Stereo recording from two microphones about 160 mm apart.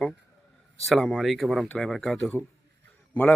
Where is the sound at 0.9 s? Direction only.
Centre (ahead or behind).